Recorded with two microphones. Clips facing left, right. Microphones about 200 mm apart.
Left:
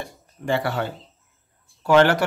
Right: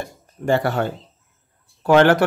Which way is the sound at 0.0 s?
45° right (ahead or behind).